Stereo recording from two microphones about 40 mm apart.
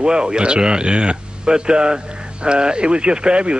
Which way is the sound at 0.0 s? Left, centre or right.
Right.